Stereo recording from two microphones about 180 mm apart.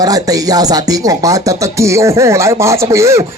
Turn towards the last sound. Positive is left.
turn(degrees=-15)  # may be behind; listen again after turning